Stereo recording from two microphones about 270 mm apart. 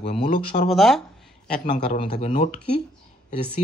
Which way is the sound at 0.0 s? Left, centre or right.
Left.